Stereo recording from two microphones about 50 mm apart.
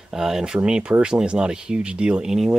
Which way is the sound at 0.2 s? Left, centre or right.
Centre.